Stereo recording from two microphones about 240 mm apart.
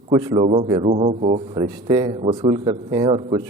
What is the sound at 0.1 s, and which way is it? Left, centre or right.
A man's voice, right.